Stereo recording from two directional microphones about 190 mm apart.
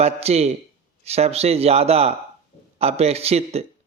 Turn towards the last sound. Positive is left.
turn(degrees=-30)  # may be behind; listen again after turning